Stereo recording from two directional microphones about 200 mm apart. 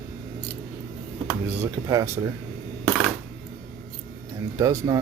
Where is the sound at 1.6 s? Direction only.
15° right (ahead or behind).